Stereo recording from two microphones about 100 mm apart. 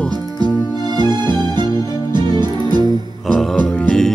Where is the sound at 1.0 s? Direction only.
45° right (ahead or behind).